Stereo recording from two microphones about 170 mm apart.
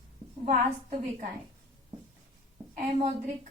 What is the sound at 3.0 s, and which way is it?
Speech, 40° right (ahead or behind).